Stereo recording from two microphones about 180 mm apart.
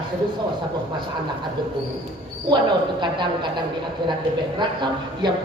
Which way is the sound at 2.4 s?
25° right (ahead or behind).